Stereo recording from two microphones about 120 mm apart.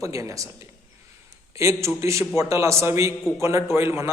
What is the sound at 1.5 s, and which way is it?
A man's voice, 25° right (ahead or behind).